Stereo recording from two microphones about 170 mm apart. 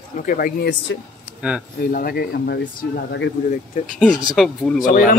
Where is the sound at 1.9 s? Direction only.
60° left (ahead or behind).